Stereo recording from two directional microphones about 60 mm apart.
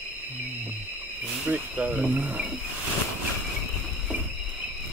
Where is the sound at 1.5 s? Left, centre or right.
Right.